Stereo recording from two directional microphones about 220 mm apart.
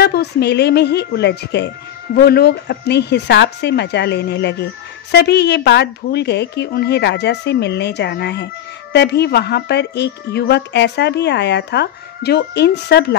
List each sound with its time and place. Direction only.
0.0 s a woman's voice: 45° left (ahead or behind)